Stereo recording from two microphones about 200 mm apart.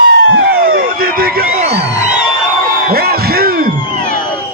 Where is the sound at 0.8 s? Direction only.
45° right (ahead or behind).